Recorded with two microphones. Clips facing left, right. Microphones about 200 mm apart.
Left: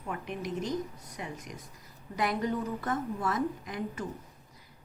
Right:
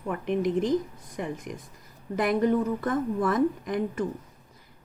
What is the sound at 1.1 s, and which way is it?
A woman's voice, 50° right (ahead or behind).